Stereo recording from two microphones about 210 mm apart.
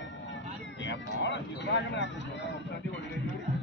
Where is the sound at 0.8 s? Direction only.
60° left (ahead or behind).